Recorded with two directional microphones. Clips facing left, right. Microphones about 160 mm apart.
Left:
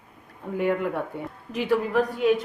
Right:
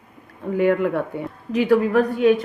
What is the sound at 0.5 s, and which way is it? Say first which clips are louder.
A woman's voice: right 6 dB; 90° right.